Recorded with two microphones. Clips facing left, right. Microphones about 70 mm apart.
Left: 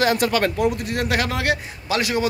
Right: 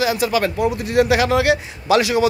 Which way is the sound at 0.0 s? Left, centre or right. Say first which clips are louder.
Right 1 dB; left.